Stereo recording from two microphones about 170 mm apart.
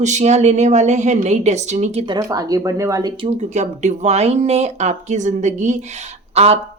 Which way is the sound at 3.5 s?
45° right (ahead or behind).